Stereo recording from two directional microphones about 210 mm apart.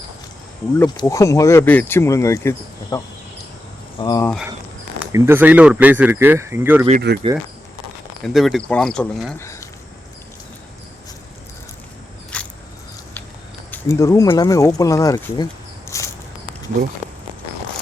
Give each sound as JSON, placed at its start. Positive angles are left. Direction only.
{"t": 0.8, "sound": "speech", "side_deg": 15}
{"t": 5.1, "sound": "speech", "side_deg": -10}
{"t": 7.1, "sound": "speech", "side_deg": -55}
{"t": 8.2, "sound": "speech", "side_deg": 0}
{"t": 12.3, "sound": "a sound", "side_deg": 5}
{"t": 13.7, "sound": "speech", "side_deg": 15}
{"t": 15.9, "sound": "a sound", "side_deg": 15}